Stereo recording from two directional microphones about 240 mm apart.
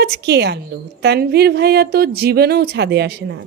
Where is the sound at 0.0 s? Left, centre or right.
Right.